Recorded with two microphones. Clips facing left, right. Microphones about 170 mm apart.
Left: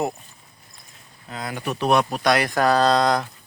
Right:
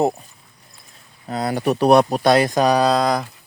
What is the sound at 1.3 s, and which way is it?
Speech, 35° right (ahead or behind).